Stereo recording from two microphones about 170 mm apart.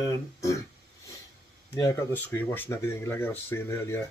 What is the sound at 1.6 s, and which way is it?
Speech, 20° left (ahead or behind).